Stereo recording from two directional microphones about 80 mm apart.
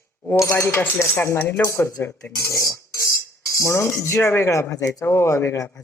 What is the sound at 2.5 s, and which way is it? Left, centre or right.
Cutlery, left.